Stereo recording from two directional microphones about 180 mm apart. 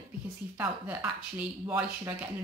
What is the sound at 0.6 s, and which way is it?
Speech, 10° right (ahead or behind).